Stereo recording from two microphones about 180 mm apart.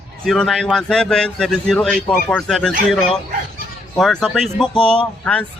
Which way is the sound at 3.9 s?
5° left (ahead or behind).